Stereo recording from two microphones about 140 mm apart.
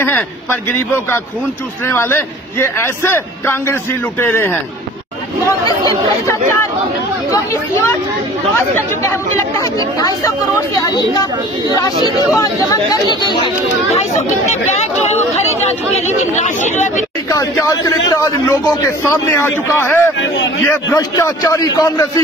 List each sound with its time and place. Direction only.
0.0 s a man's voice: 15° left (ahead or behind)
5.7 s a man's voice: 25° left (ahead or behind)
7.7 s a man's voice: 20° left (ahead or behind)
9.4 s a man's voice: 25° left (ahead or behind)
14.5 s speech: 55° left (ahead or behind)
16.3 s speech: 55° left (ahead or behind)
17.3 s a man's voice: 25° left (ahead or behind)